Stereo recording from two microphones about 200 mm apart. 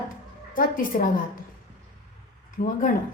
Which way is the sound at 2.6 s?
45° left (ahead or behind).